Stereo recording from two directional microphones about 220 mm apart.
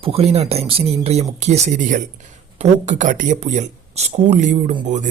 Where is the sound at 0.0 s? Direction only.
25° right (ahead or behind).